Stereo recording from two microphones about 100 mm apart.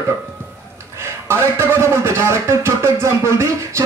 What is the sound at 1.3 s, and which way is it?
A man's voice, 25° right (ahead or behind).